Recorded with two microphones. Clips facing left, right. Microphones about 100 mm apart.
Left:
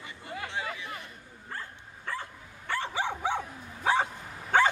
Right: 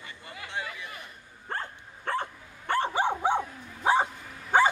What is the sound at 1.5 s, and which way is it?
Dog, 60° right (ahead or behind).